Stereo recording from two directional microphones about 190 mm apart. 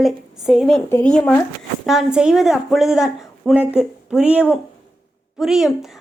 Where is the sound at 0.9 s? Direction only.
10° left (ahead or behind).